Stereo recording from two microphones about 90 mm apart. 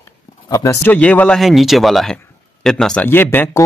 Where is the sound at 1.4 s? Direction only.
Centre (ahead or behind).